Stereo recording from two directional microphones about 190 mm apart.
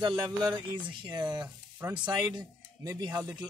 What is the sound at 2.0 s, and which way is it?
Speech, 25° right (ahead or behind).